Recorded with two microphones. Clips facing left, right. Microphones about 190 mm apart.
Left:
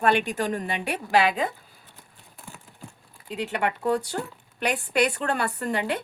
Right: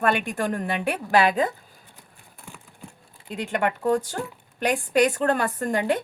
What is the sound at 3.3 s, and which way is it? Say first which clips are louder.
A woman's voice: right 2 dB; 45° right (ahead or behind).